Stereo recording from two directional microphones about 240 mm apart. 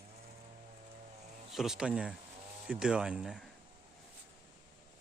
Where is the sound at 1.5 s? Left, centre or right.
Centre.